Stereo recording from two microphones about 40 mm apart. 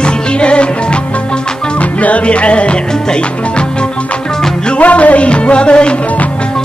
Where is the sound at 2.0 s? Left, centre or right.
Left.